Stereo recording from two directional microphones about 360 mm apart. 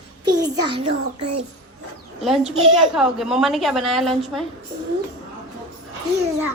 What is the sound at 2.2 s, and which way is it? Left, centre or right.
A woman's voice, centre.